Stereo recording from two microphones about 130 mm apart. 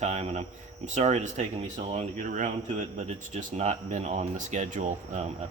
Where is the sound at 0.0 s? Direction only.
55° right (ahead or behind).